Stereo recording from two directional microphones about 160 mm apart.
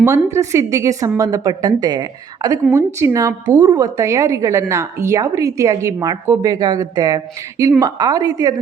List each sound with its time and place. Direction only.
0.0 s a woman's voice: 15° right (ahead or behind)